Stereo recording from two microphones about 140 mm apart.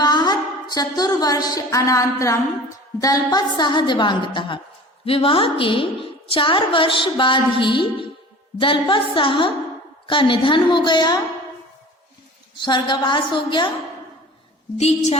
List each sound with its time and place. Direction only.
0.0 s a sound: 30° left (ahead or behind)
3.0 s a woman's voice: 25° left (ahead or behind)
12.5 s a woman's voice: 30° left (ahead or behind)
14.8 s a woman's voice: 50° left (ahead or behind)